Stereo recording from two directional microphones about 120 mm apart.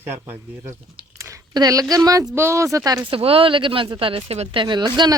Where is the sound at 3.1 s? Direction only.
50° right (ahead or behind).